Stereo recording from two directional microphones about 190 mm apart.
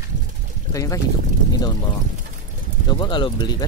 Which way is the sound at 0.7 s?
15° left (ahead or behind).